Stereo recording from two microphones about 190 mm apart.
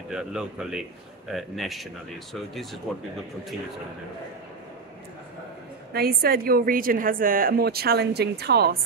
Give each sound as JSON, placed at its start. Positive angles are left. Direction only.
{"t": 0.1, "sound": "speech", "side_deg": -5}
{"t": 2.9, "sound": "speech", "side_deg": 0}
{"t": 5.9, "sound": "a woman's voice", "side_deg": -50}